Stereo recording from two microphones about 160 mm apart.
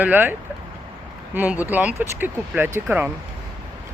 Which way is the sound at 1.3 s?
10° right (ahead or behind).